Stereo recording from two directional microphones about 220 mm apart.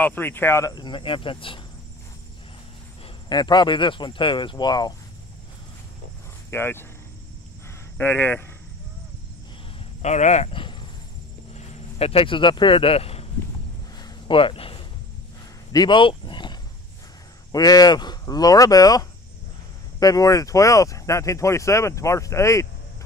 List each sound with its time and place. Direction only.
0.0 s speech: 10° left (ahead or behind)
3.3 s speech: 20° left (ahead or behind)
6.5 s speech: 10° left (ahead or behind)
8.0 s speech: 10° left (ahead or behind)
10.0 s speech: 30° left (ahead or behind)
13.9 s a sound: 20° left (ahead or behind)
15.7 s speech: 20° left (ahead or behind)